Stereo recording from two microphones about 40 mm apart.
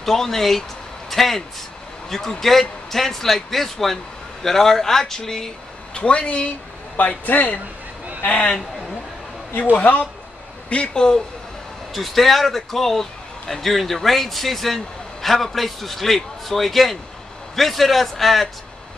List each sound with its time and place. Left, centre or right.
0.0 s speech: centre
5.9 s speech: left
7.0 s a man's voice: left
9.8 s a man's voice: left; by 11.2 s centre
11.9 s a man's voice: centre